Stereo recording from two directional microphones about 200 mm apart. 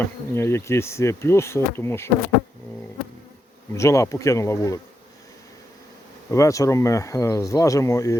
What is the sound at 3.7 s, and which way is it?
Speech, 15° left (ahead or behind).